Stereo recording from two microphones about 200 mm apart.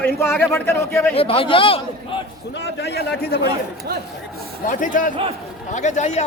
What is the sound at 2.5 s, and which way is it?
Speech, 55° left (ahead or behind).